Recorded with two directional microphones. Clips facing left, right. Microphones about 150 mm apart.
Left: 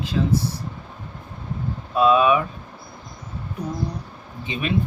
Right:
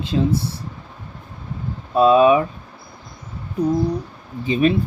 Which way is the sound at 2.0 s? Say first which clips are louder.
Right 4 dB; 35° right (ahead or behind).